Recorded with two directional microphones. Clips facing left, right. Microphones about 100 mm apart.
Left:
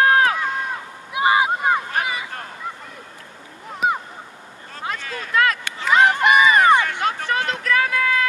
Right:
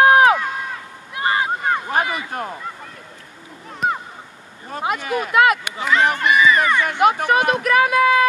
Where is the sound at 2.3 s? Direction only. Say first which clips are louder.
Right 7 dB; 20° right (ahead or behind).